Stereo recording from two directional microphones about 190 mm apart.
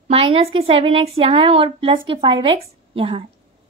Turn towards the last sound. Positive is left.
turn(degrees=-30)  # may be behind; listen again after turning